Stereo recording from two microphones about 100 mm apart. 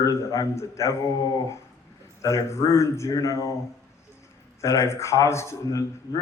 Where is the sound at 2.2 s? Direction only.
30° left (ahead or behind).